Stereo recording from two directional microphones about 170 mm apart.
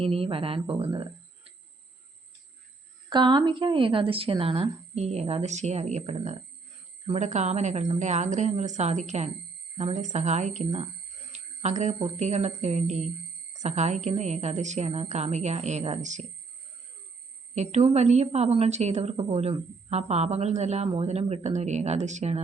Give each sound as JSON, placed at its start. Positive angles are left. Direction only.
{"t": 0.0, "sound": "a woman's voice", "side_deg": -35}
{"t": 3.1, "sound": "a woman's voice", "side_deg": -25}
{"t": 11.3, "sound": "a sound", "side_deg": -40}
{"t": 11.9, "sound": "a woman's voice", "side_deg": -40}
{"t": 17.5, "sound": "a woman's voice", "side_deg": -40}